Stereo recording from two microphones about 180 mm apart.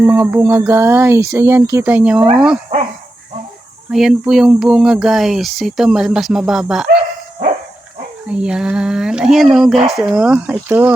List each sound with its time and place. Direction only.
0.0 s speech: 10° right (ahead or behind)
3.9 s speech: centre (ahead or behind)
6.9 s dog: 35° right (ahead or behind)
8.3 s speech: 5° right (ahead or behind)